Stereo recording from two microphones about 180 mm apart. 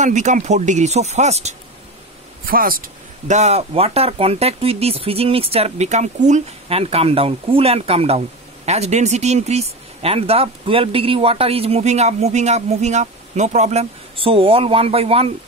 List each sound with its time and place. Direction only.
0.0 s speech: 40° right (ahead or behind)
2.4 s speech: 55° right (ahead or behind); by 15.3 s 30° right (ahead or behind)